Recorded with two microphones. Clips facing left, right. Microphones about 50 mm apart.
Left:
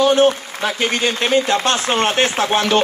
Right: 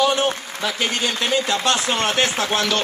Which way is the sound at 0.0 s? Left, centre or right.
Left.